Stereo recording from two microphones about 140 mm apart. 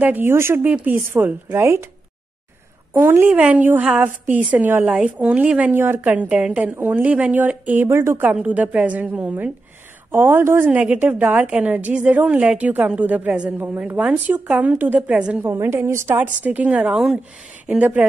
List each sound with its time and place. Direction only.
0.0 s a woman's voice: 15° right (ahead or behind)
2.9 s a woman's voice: 15° right (ahead or behind)